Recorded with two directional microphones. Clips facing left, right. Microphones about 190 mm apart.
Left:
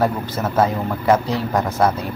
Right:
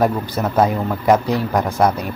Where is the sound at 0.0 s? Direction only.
15° right (ahead or behind).